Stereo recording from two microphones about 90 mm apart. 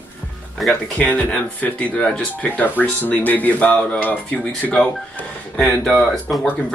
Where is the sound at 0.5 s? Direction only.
Centre (ahead or behind).